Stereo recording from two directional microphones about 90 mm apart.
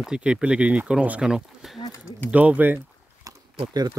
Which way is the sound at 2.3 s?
15° right (ahead or behind).